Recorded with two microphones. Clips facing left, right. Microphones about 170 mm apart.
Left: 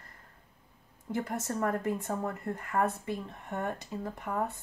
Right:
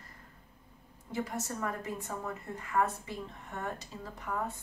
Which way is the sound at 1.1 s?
55° left (ahead or behind).